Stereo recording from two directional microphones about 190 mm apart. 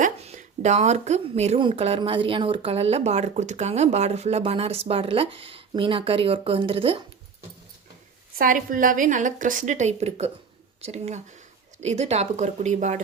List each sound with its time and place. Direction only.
0.0 s a woman's voice: 35° right (ahead or behind)
8.4 s a woman's voice: 45° right (ahead or behind)